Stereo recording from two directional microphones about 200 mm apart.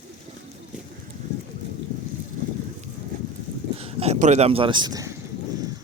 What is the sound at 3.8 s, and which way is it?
Speech, 30° right (ahead or behind).